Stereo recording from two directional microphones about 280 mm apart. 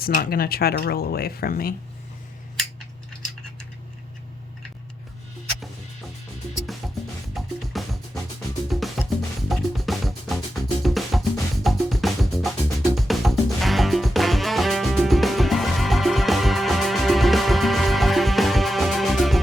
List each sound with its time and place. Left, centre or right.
0.0 s speech: left
7.3 s music: centre